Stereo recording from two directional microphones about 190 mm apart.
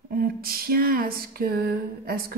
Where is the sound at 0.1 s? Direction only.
50° right (ahead or behind).